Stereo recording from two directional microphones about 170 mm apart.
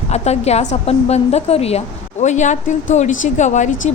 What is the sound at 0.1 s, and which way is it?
A woman's voice, 40° left (ahead or behind).